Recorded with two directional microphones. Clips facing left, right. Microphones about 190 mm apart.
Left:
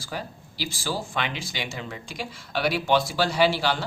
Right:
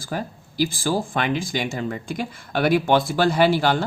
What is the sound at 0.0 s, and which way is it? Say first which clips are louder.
Speech: right 5 dB; 50° right (ahead or behind).